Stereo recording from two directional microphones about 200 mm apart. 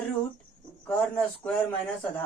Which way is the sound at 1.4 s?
5° left (ahead or behind).